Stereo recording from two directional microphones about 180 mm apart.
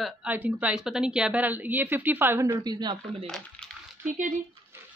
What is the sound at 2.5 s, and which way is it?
Speech, 25° right (ahead or behind).